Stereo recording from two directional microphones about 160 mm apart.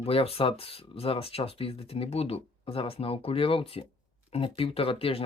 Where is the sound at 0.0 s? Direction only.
35° left (ahead or behind).